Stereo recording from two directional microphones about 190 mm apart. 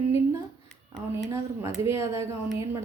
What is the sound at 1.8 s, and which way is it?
Speech, 15° right (ahead or behind).